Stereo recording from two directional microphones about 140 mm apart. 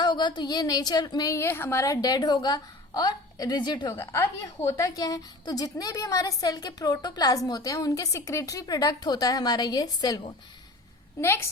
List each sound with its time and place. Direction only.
0.0 s a woman's voice: 30° left (ahead or behind)
3.9 s a woman's voice: 15° left (ahead or behind)